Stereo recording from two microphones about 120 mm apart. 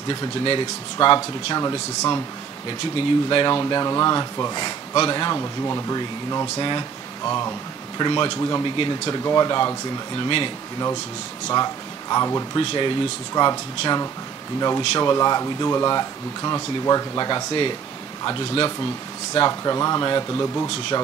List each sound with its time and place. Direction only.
0.1 s speech: 40° left (ahead or behind)
3.3 s speech: 40° left (ahead or behind)
5.9 s speech: 40° left (ahead or behind)
7.2 s speech: 25° left (ahead or behind)
8.0 s speech: 40° left (ahead or behind)
8.4 s speech: 25° left (ahead or behind)
8.6 s speech: 40° left (ahead or behind)
11.4 s speech: 30° left (ahead or behind)
12.5 s speech: 40° left (ahead or behind)